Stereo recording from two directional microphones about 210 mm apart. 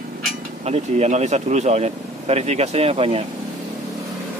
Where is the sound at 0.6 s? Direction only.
30° right (ahead or behind).